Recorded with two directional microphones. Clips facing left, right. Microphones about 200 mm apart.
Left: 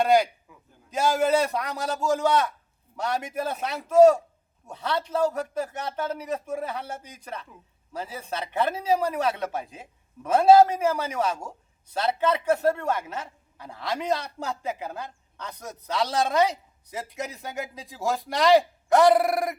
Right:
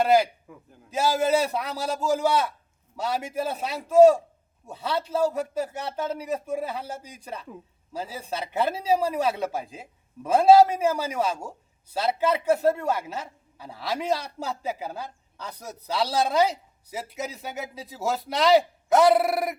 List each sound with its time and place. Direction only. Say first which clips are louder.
0.0 s a man's voice: even; 5° right (ahead or behind)
0.5 s a man's voice: right 7 dB; 50° right (ahead or behind)
0.9 s a man's voice: even; 5° right (ahead or behind)
8.2 s a man's voice: even; 10° right (ahead or behind)